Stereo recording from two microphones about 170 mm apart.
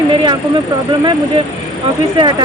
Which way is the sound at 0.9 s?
30° right (ahead or behind).